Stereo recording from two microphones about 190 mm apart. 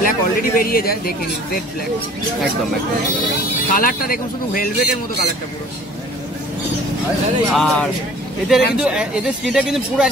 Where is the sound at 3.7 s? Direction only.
50° left (ahead or behind).